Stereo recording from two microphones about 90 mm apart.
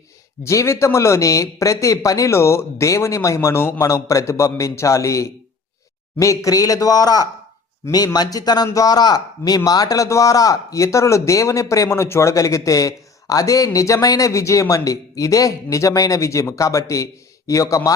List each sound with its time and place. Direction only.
0.4 s a man's voice: 35° left (ahead or behind)